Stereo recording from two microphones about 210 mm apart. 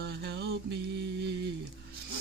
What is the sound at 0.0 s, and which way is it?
Music, 50° right (ahead or behind).